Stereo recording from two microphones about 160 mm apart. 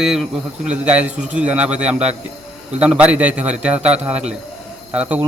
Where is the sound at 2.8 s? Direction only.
5° right (ahead or behind).